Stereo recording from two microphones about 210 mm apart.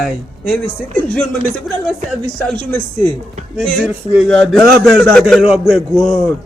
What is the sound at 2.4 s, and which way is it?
A man's voice, 5° left (ahead or behind).